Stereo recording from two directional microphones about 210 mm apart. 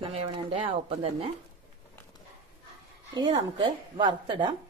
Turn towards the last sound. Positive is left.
turn(degrees=-25)  # may be behind; listen again after turning